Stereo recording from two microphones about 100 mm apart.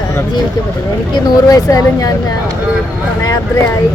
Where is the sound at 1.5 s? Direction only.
40° left (ahead or behind).